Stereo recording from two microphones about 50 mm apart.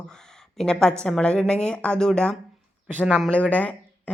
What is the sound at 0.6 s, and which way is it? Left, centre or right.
A woman's voice, centre.